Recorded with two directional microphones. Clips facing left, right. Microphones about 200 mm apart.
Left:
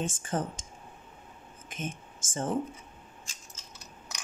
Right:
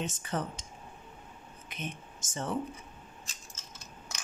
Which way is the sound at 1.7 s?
45° left (ahead or behind).